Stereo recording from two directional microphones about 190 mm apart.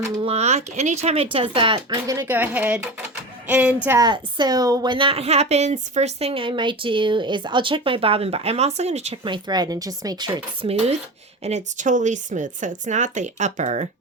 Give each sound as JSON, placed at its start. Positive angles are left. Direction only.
{"t": 0.2, "sound": "a woman's voice", "side_deg": -35}
{"t": 3.4, "sound": "music", "side_deg": -10}
{"t": 3.8, "sound": "a woman's voice", "side_deg": -20}